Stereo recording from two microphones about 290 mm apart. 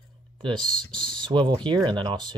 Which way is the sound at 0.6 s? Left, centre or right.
Centre.